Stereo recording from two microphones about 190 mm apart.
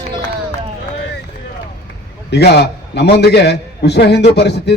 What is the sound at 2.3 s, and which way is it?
A man's voice, 60° left (ahead or behind).